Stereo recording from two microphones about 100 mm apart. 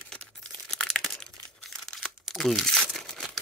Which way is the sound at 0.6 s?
5° left (ahead or behind).